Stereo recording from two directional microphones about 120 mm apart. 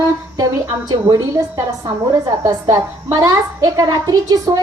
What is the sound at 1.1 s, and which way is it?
A woman's voice, 30° right (ahead or behind).